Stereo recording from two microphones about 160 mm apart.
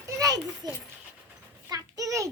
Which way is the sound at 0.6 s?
25° right (ahead or behind).